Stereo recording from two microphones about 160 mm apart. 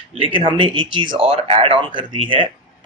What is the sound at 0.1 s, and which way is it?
Speech, 35° right (ahead or behind).